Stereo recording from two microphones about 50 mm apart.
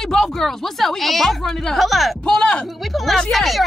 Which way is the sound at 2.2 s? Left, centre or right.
Centre.